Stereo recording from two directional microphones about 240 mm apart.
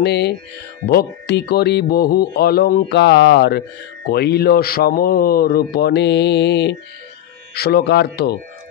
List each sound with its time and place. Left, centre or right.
0.0 s speech: left